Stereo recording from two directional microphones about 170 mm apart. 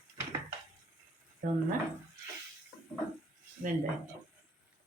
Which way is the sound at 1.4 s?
70° right (ahead or behind).